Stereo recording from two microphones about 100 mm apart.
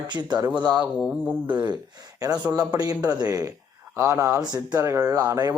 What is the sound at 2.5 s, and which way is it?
Speech, 35° right (ahead or behind).